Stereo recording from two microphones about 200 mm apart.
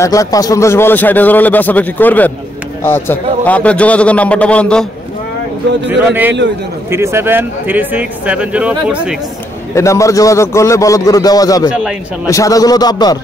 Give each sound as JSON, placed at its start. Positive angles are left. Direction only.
{"t": 0.0, "sound": "a man's voice", "side_deg": 15}
{"t": 5.9, "sound": "speech", "side_deg": -10}
{"t": 9.8, "sound": "a man's voice", "side_deg": 15}